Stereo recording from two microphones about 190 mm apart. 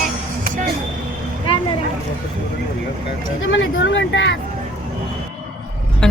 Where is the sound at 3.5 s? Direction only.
75° left (ahead or behind).